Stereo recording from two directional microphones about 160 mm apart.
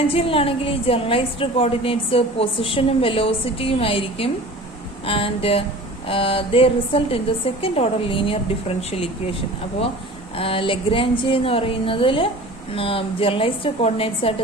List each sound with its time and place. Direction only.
0.1 s a woman's voice: 35° left (ahead or behind)
10.3 s a woman's voice: 35° left (ahead or behind)